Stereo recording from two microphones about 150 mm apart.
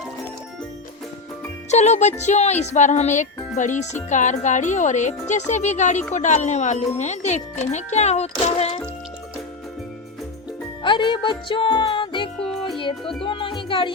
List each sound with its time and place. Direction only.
1.7 s speech: 50° left (ahead or behind)
10.8 s music: 30° left (ahead or behind)
12.4 s music: centre (ahead or behind)
12.7 s music: 35° left (ahead or behind)